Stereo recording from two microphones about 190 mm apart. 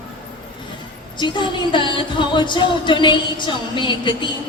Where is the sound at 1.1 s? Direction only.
25° left (ahead or behind).